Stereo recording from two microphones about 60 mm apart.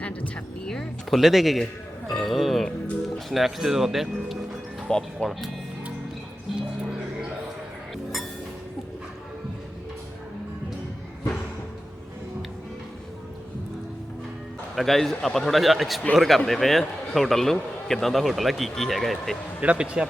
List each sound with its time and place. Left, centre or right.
0.0 s speech: left
0.7 s speech: centre
1.2 s speech: centre
4.9 s speech: centre
14.8 s speech: centre
19.6 s a man's voice: centre